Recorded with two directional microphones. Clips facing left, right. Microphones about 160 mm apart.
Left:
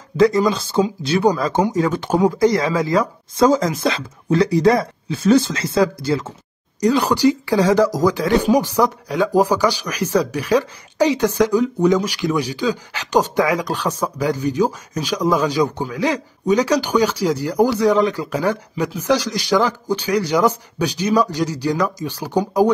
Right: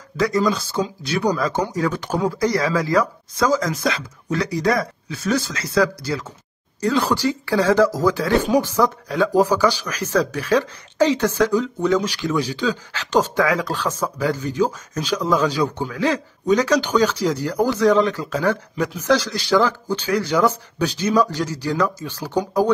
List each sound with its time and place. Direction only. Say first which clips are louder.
0.5 s speech: left 4 dB; 25° left (ahead or behind)
6.8 s speech: left 4 dB; 15° left (ahead or behind)